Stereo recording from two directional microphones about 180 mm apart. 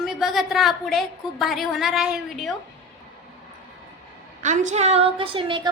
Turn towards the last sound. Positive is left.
turn(degrees=-30)  # may be behind; listen again after turning